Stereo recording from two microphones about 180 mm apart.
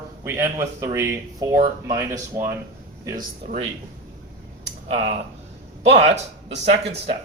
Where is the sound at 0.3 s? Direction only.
15° right (ahead or behind).